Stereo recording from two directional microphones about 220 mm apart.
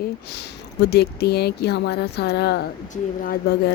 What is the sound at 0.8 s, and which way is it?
Speech, 50° left (ahead or behind).